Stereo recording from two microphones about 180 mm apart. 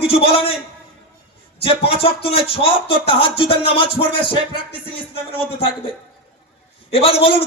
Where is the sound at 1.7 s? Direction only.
30° left (ahead or behind).